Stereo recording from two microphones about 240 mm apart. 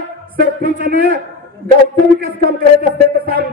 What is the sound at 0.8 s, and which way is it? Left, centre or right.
Speech, right.